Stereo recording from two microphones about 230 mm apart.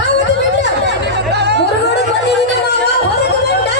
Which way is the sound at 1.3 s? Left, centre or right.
Right.